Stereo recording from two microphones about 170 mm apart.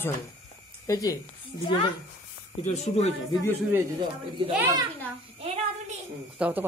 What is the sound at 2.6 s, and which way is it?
Speech, 40° left (ahead or behind).